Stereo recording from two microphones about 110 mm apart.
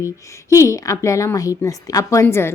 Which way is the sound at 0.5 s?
25° left (ahead or behind).